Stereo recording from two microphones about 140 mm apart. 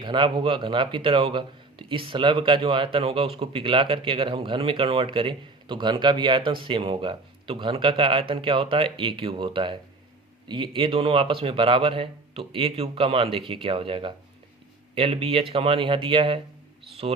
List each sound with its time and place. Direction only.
0.0 s speech: 35° right (ahead or behind)